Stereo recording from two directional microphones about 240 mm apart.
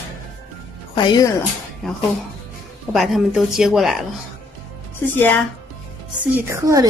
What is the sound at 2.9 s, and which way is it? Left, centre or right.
A woman's voice, centre.